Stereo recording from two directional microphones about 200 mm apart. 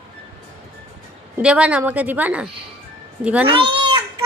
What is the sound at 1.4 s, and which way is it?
A woman's voice, 5° right (ahead or behind).